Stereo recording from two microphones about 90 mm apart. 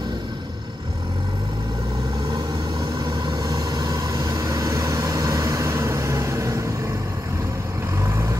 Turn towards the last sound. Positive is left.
turn(degrees=-35)  # may be behind; listen again after turning